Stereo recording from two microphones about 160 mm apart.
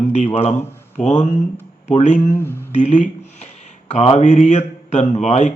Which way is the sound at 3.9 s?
40° left (ahead or behind).